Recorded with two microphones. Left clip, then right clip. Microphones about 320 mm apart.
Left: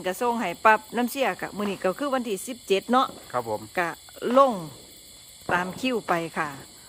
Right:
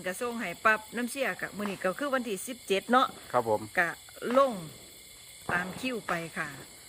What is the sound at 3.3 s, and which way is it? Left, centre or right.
Speech, right.